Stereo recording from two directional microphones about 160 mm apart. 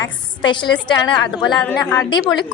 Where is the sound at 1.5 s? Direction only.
5° left (ahead or behind).